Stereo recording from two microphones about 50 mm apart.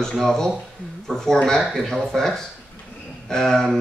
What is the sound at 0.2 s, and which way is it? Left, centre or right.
Speech, centre.